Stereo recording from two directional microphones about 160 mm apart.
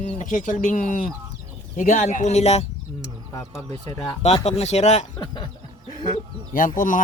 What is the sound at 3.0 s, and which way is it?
Speech, 20° left (ahead or behind).